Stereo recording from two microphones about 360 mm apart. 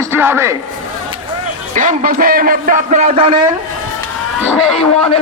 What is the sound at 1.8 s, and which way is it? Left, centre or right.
A man's voice, right.